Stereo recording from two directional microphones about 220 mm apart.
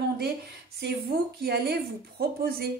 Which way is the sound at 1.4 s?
45° right (ahead or behind).